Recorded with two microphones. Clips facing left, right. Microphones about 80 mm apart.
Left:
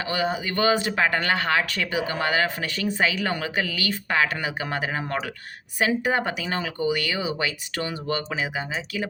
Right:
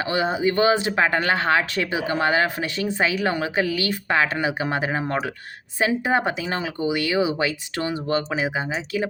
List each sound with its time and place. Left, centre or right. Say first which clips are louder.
0.0 s speech: right 4 dB; right